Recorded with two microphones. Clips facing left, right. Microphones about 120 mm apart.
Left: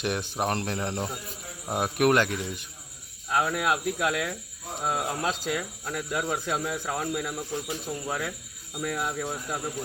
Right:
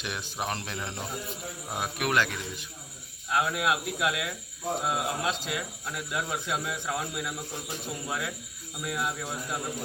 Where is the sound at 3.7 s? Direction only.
40° left (ahead or behind).